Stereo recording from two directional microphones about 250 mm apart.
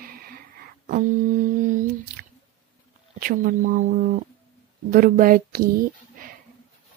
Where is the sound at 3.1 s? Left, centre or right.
Right.